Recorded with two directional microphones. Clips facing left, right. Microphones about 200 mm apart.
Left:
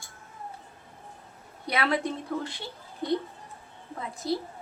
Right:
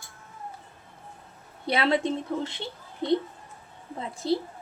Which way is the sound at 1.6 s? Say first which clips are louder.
Right 3 dB; 25° right (ahead or behind).